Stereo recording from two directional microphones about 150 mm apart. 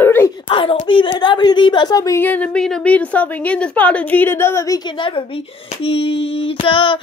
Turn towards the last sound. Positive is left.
turn(degrees=35)  # may be behind; listen again after turning